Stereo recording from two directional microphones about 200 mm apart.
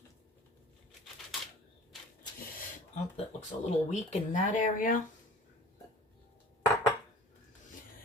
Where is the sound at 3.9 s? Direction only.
35° left (ahead or behind).